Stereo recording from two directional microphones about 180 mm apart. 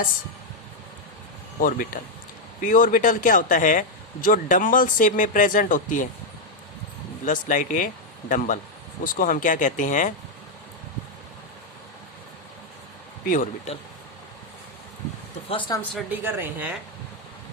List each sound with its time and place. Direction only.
1.6 s speech: 50° left (ahead or behind)
7.3 s speech: 45° left (ahead or behind)
13.2 s speech: 45° left (ahead or behind)
15.4 s speech: 30° left (ahead or behind)
16.0 s a woman's voice: 10° right (ahead or behind)